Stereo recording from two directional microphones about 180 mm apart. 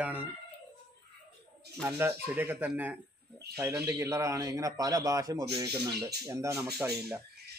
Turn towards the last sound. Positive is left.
turn(degrees=-5)  # may be behind; listen again after turning